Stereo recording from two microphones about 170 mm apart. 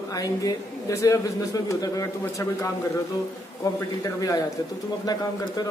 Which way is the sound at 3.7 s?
20° left (ahead or behind).